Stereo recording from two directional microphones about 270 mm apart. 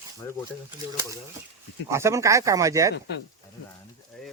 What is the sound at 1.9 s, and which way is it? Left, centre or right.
Speech, centre.